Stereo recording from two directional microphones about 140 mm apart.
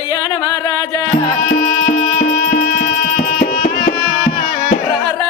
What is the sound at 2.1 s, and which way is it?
Music, 90° left.